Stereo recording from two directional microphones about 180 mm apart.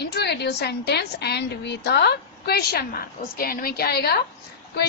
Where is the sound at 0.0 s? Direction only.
65° left (ahead or behind).